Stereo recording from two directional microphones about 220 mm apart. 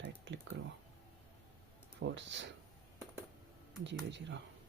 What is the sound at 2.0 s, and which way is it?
Speech, 55° right (ahead or behind).